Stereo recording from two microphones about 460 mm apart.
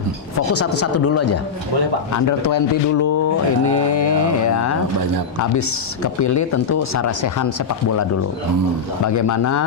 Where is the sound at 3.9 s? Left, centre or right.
Left.